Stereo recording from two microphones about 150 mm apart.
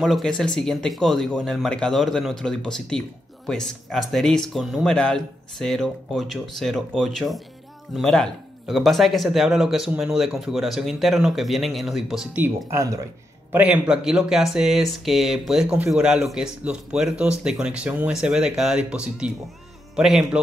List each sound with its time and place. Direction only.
0.0 s speech: centre (ahead or behind)
12.7 s speech: 20° right (ahead or behind)
13.5 s speech: 10° right (ahead or behind)